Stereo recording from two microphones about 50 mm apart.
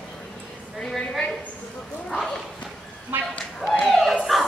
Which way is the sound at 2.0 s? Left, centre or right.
Centre.